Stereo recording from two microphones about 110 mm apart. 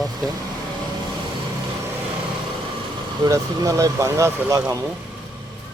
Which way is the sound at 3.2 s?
35° right (ahead or behind).